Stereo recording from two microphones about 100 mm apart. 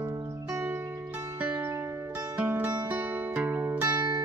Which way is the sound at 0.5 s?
25° right (ahead or behind).